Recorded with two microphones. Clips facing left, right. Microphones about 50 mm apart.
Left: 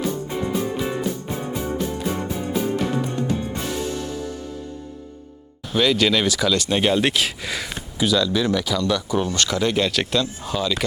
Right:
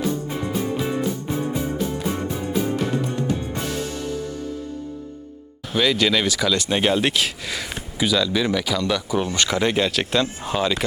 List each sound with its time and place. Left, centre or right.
0.3 s music: centre
5.7 s speech: centre
10.2 s speech: right